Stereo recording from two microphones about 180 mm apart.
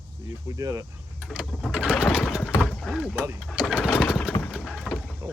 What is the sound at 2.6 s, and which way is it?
Mechanisms, 5° left (ahead or behind).